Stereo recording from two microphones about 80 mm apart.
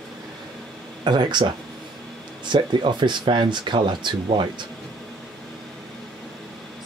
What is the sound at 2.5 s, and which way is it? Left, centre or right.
Speech, right.